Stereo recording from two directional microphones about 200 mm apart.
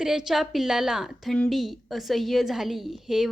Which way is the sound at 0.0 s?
Centre (ahead or behind).